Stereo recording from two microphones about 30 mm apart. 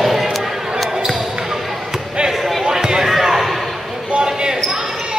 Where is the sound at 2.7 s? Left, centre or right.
Right.